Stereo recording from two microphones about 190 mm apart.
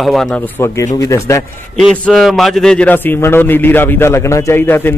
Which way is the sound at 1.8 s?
Centre (ahead or behind).